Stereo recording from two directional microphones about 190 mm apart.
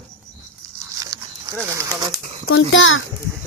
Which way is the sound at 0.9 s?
20° right (ahead or behind).